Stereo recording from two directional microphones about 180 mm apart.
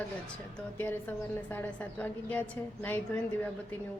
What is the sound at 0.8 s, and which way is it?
A woman's voice, 10° left (ahead or behind).